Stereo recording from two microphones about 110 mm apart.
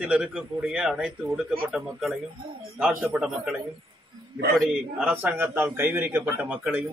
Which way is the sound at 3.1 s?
15° right (ahead or behind).